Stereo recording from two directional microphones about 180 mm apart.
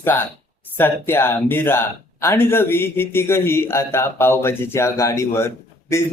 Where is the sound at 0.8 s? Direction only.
10° left (ahead or behind).